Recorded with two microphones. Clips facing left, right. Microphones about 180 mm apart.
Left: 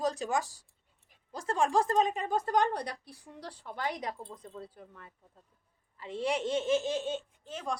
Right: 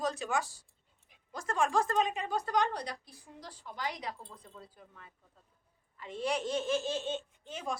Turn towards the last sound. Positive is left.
turn(degrees=0)  # may be behind; listen again after turning